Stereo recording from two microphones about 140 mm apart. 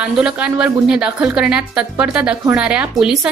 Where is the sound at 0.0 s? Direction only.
5° right (ahead or behind).